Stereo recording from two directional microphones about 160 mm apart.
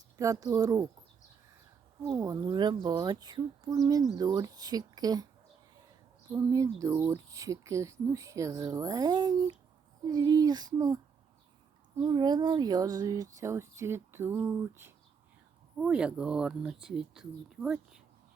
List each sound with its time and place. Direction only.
0.2 s speech: 20° right (ahead or behind)
2.0 s speech: 20° right (ahead or behind)
6.3 s speech: 20° right (ahead or behind); by 18.0 s 5° right (ahead or behind)